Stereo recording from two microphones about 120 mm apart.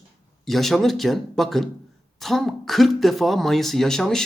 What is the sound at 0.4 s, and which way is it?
Speech, centre (ahead or behind).